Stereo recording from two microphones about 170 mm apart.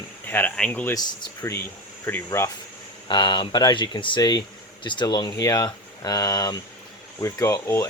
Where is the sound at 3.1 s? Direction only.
25° left (ahead or behind).